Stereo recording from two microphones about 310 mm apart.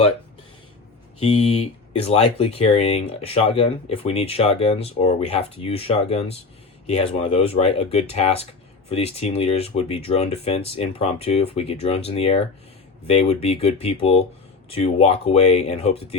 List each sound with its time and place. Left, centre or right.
1.2 s speech: centre